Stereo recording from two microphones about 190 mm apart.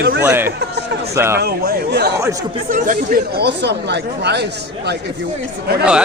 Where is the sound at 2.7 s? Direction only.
45° right (ahead or behind).